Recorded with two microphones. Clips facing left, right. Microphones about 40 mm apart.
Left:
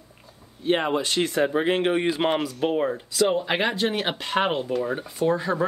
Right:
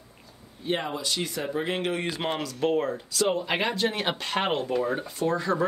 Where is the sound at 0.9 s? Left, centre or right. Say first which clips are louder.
Left 7 dB; left.